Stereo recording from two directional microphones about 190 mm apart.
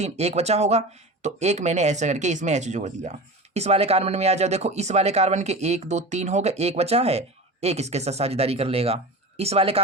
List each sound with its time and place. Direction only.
0.0 s speech: 35° right (ahead or behind)